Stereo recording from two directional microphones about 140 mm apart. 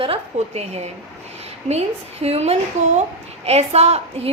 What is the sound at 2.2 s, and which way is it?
A woman's voice, 50° right (ahead or behind).